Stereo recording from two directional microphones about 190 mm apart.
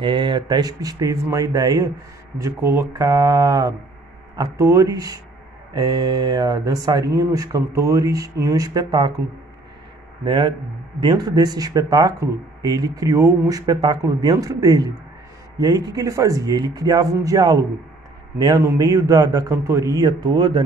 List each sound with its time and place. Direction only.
0.0 s speech: 25° right (ahead or behind)
10.2 s speech: 25° right (ahead or behind)